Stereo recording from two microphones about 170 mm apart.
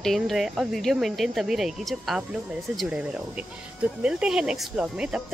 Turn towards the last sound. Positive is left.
turn(degrees=-5)  # may be behind; listen again after turning